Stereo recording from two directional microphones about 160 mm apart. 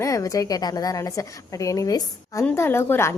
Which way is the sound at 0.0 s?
20° left (ahead or behind).